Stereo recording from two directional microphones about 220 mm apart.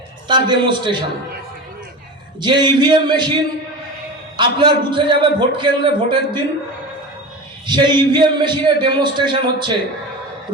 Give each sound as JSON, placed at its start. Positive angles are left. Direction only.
{"t": 0.3, "sound": "a man's voice", "side_deg": -20}
{"t": 2.4, "sound": "a man's voice", "side_deg": -20}
{"t": 4.4, "sound": "a man's voice", "side_deg": -20}
{"t": 7.7, "sound": "a man's voice", "side_deg": -20}